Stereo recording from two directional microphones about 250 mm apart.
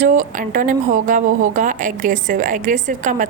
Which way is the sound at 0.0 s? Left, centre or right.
Right.